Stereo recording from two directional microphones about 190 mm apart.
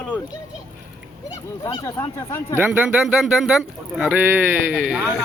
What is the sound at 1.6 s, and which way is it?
Speech, 20° left (ahead or behind).